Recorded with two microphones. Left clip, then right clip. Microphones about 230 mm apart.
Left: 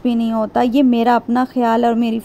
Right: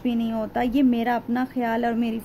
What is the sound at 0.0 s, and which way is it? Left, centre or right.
Speech, left.